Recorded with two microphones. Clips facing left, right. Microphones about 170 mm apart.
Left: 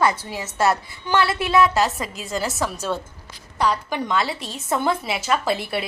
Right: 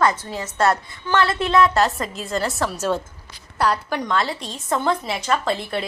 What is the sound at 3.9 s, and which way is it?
A woman's voice, 5° left (ahead or behind).